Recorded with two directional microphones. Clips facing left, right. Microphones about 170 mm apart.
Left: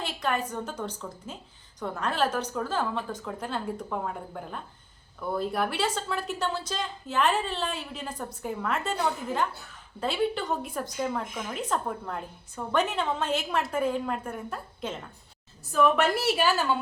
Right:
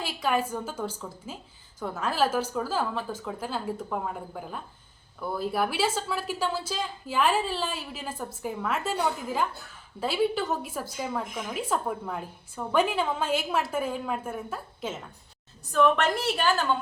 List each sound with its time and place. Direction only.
0.0 s a woman's voice: 5° right (ahead or behind)